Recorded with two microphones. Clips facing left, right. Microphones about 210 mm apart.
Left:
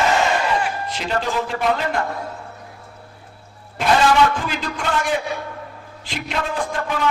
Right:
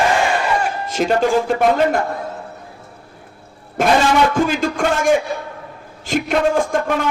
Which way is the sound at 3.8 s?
45° right (ahead or behind).